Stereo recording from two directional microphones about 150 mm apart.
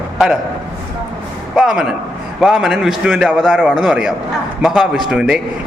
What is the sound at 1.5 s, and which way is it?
A man's voice, 5° right (ahead or behind).